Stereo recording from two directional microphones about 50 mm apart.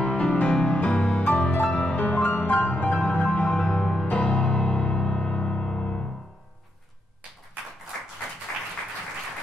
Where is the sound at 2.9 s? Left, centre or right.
Centre.